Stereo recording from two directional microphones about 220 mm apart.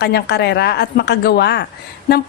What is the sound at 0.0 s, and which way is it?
A woman's voice, 50° left (ahead or behind).